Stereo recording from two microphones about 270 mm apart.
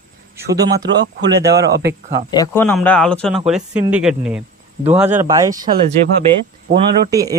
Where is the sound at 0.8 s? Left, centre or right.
Right.